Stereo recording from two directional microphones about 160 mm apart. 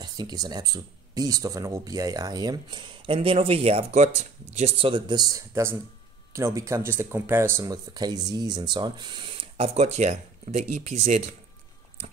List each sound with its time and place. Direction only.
0.0 s speech: 25° right (ahead or behind); by 11.3 s 45° right (ahead or behind)